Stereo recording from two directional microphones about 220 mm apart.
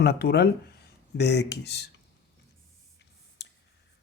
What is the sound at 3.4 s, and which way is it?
Clicking, 50° left (ahead or behind).